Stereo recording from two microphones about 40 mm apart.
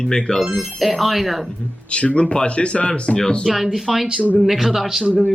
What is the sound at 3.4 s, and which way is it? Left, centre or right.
Speech, centre.